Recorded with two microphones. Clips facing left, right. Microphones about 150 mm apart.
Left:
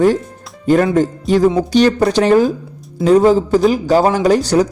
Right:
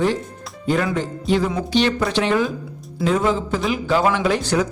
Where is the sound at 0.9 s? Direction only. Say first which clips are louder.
Left 7 dB; 45° left (ahead or behind).